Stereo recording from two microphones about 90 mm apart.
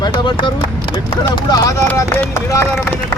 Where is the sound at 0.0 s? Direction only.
60° left (ahead or behind).